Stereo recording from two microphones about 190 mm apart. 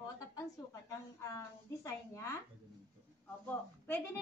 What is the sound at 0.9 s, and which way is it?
A woman's voice, 15° left (ahead or behind).